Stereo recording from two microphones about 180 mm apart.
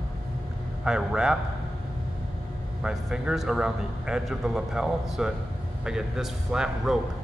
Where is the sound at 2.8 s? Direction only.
5° right (ahead or behind).